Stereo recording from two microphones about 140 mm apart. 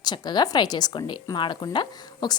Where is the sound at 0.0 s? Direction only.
30° left (ahead or behind).